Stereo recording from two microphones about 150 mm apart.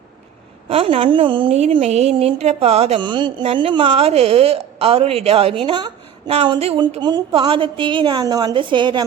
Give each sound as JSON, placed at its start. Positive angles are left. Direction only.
{"t": 0.7, "sound": "a woman's voice", "side_deg": -40}